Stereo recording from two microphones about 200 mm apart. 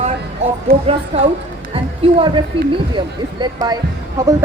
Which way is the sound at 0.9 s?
30° right (ahead or behind).